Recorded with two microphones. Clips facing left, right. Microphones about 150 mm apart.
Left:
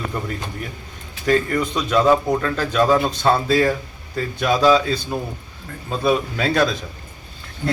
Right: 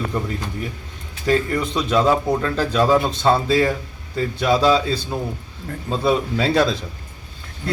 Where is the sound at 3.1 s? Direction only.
25° right (ahead or behind).